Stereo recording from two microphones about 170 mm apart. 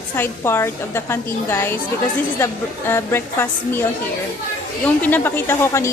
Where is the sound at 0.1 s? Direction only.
15° left (ahead or behind).